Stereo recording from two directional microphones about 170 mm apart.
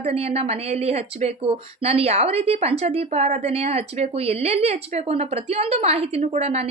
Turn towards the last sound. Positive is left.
turn(degrees=-40)  # may be behind; listen again after turning